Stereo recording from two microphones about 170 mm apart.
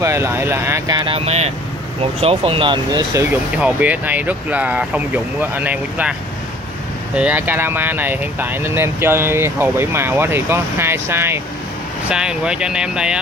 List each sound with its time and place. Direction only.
0.0 s speech: 15° right (ahead or behind)
3.2 s speech: 10° right (ahead or behind)
7.2 s speech: 10° right (ahead or behind)